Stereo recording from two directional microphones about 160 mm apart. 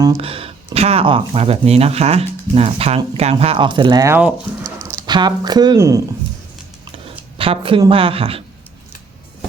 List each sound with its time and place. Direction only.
0.2 s speech: 35° right (ahead or behind)
4.6 s a sound: 20° right (ahead or behind)
5.0 s speech: 25° right (ahead or behind)
7.3 s speech: 35° right (ahead or behind)